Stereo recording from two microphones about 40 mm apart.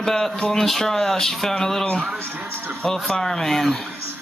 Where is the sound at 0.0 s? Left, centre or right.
Centre.